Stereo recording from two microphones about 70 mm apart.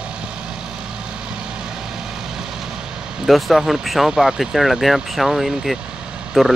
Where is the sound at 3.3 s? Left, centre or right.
Centre.